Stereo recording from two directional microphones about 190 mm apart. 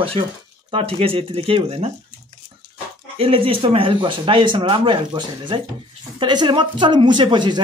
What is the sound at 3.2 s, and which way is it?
Speech, 30° right (ahead or behind).